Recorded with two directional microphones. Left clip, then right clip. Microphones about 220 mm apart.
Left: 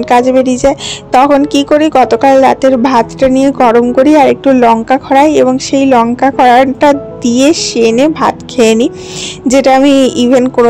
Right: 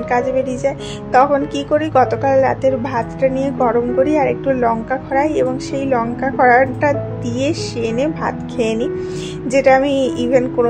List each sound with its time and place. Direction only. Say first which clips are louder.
0.1 s a woman's voice: left 10 dB; 40° left (ahead or behind)